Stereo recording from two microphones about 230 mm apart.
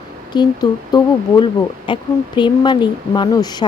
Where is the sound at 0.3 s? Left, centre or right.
Centre.